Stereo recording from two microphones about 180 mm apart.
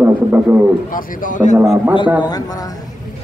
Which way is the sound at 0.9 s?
45° left (ahead or behind).